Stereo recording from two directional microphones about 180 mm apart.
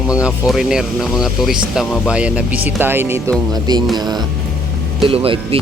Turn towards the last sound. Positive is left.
turn(degrees=-30)  # may be behind; listen again after turning